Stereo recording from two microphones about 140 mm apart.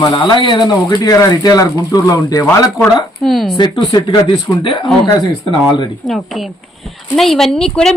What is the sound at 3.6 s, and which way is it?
Speech, 30° left (ahead or behind).